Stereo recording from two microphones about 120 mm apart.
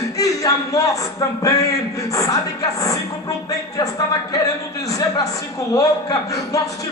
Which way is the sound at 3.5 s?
30° left (ahead or behind).